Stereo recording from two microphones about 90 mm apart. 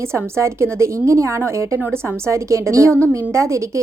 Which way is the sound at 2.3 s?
35° right (ahead or behind).